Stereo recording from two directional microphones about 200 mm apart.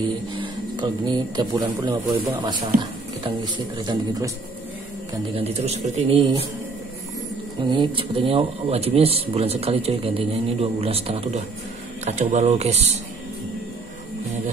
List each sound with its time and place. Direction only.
0.4 s speech: 20° right (ahead or behind)
5.3 s a man's voice: 30° right (ahead or behind)
7.6 s a man's voice: 25° right (ahead or behind)